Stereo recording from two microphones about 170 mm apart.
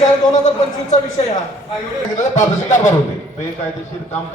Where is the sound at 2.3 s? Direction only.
45° left (ahead or behind).